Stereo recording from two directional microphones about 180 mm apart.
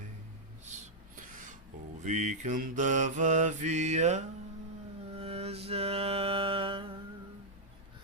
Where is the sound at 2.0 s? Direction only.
40° right (ahead or behind).